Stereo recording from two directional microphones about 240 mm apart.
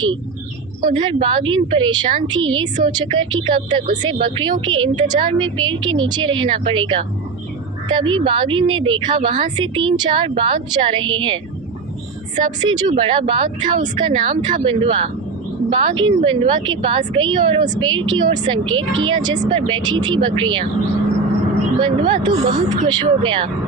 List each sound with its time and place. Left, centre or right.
0.9 s a woman's voice: centre
12.4 s a woman's voice: centre
21.8 s a woman's voice: centre